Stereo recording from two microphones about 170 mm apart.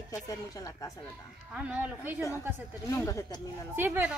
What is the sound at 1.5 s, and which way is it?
Speech, 5° right (ahead or behind).